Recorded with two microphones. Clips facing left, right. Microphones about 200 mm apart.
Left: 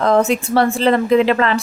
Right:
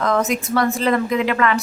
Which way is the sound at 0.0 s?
30° left (ahead or behind).